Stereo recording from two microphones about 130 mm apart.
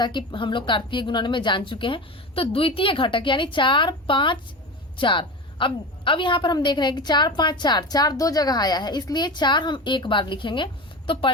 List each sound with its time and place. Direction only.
0.0 s a woman's voice: 35° left (ahead or behind)